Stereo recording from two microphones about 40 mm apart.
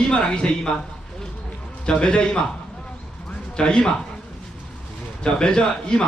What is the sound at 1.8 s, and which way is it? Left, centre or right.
Speech, left.